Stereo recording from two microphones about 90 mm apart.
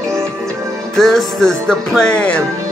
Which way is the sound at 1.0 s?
5° left (ahead or behind).